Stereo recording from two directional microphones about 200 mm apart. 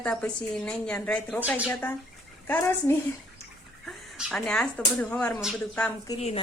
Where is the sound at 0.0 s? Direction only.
5° left (ahead or behind).